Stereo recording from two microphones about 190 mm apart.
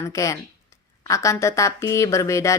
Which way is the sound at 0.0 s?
15° left (ahead or behind).